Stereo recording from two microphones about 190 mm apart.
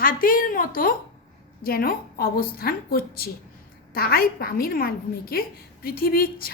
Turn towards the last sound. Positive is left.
turn(degrees=50)  # may be behind; listen again after turning